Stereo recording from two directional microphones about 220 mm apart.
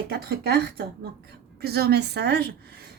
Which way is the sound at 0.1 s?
45° right (ahead or behind).